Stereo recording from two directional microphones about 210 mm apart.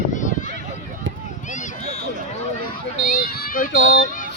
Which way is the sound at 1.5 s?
35° left (ahead or behind).